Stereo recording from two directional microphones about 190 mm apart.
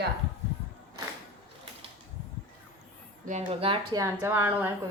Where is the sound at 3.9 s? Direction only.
15° right (ahead or behind).